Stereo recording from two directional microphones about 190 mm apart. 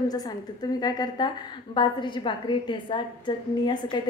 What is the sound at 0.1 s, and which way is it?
A woman's voice, 20° left (ahead or behind).